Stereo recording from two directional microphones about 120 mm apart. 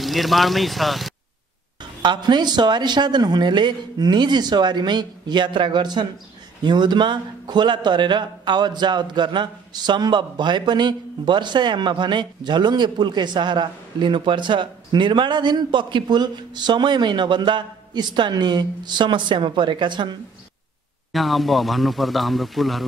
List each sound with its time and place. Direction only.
0.0 s a man's voice: centre (ahead or behind)
1.8 s a man's voice: 40° right (ahead or behind)
21.1 s a man's voice: centre (ahead or behind)